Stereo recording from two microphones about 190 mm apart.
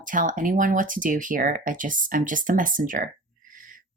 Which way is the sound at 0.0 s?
45° right (ahead or behind).